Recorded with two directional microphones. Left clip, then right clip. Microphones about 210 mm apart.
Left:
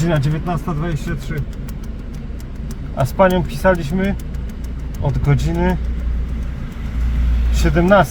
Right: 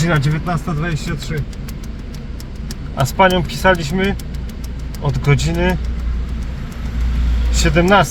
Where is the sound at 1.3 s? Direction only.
25° left (ahead or behind).